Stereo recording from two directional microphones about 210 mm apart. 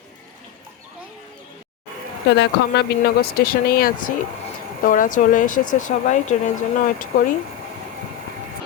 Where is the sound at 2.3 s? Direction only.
55° left (ahead or behind); by 6.3 s 35° left (ahead or behind).